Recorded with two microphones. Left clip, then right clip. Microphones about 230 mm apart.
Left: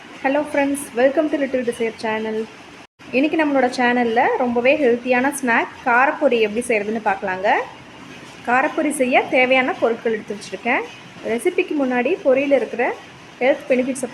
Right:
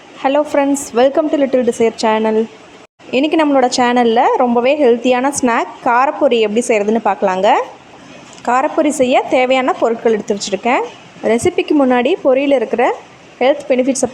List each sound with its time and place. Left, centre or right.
0.2 s a woman's voice: right